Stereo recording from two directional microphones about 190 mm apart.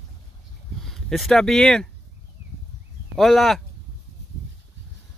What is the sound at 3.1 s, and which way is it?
Speech, centre (ahead or behind).